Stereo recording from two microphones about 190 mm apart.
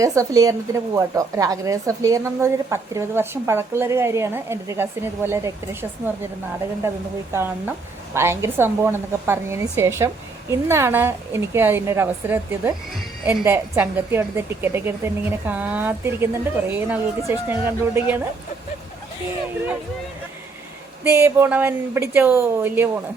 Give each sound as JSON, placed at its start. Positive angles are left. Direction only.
{"t": 0.0, "sound": "a woman's voice", "side_deg": -15}
{"t": 7.3, "sound": "a woman's voice", "side_deg": -10}
{"t": 21.0, "sound": "a woman's voice", "side_deg": -15}